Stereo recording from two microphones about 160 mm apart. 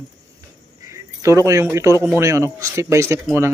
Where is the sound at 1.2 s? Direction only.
20° right (ahead or behind).